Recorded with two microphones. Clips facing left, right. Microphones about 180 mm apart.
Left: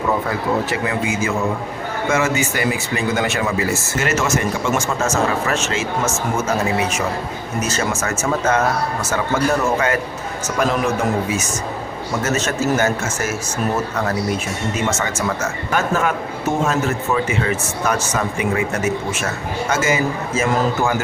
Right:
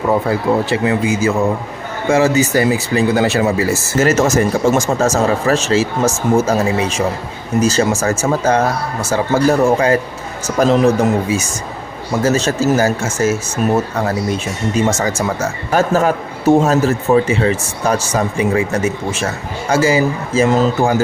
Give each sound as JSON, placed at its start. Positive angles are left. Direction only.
{"t": 0.3, "sound": "a man's voice", "side_deg": -30}
{"t": 14.9, "sound": "a man's voice", "side_deg": -35}